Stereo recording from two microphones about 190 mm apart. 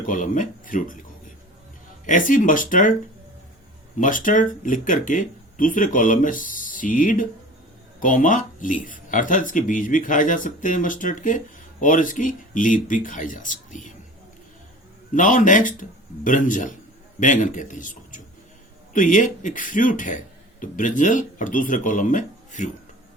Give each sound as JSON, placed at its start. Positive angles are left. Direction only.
{"t": 0.1, "sound": "speech", "side_deg": 45}
{"t": 2.0, "sound": "speech", "side_deg": 45}
{"t": 3.9, "sound": "speech", "side_deg": 45}
{"t": 15.1, "sound": "speech", "side_deg": 40}